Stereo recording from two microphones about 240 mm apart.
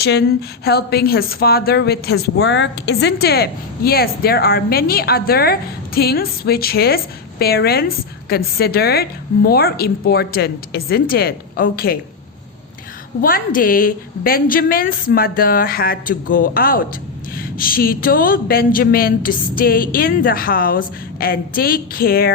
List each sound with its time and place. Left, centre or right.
0.0 s a woman's voice: left
13.2 s a woman's voice: left